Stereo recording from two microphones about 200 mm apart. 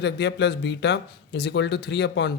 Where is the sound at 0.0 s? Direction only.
60° left (ahead or behind).